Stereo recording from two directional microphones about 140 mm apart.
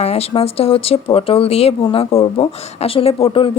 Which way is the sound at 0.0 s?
50° left (ahead or behind).